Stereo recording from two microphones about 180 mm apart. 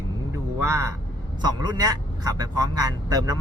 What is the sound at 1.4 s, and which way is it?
A man's voice, 20° right (ahead or behind).